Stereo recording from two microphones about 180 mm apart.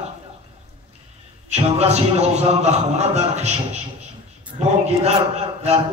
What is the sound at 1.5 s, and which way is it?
Speech, 35° right (ahead or behind).